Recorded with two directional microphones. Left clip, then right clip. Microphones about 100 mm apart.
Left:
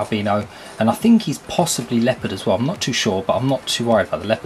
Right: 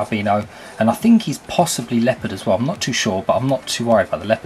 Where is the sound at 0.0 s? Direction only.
15° left (ahead or behind).